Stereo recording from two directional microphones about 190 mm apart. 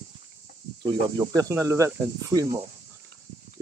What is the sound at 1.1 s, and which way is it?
Speech, 15° right (ahead or behind).